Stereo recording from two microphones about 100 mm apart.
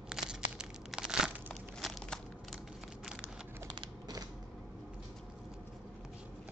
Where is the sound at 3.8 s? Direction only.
40° right (ahead or behind).